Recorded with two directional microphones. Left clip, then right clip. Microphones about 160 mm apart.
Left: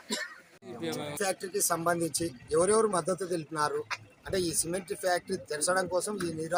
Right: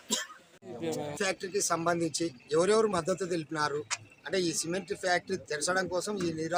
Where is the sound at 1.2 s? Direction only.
5° right (ahead or behind).